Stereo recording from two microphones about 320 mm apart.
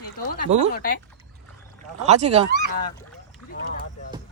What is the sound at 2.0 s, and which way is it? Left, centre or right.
Speech, centre.